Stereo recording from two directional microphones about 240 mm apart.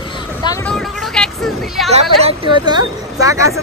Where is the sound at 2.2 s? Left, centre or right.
Centre.